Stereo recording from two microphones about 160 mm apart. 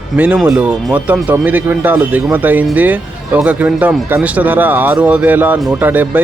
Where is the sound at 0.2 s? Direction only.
10° right (ahead or behind).